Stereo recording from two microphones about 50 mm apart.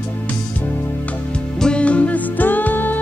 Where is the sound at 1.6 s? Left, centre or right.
Left.